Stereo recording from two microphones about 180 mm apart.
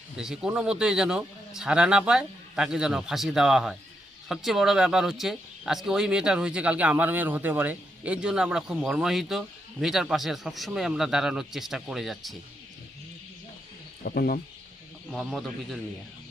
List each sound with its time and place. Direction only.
0.2 s speech: 5° right (ahead or behind)
14.0 s speech: 60° left (ahead or behind)
15.1 s speech: centre (ahead or behind)